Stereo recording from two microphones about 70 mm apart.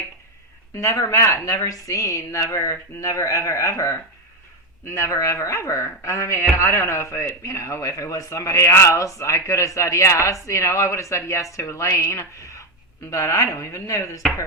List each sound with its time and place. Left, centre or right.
0.8 s a man's voice: left